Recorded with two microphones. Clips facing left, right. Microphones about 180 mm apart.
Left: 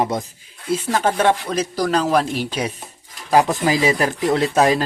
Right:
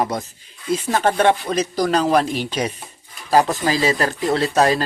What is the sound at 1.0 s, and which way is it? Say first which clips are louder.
Speech: right 2 dB; 5° left (ahead or behind).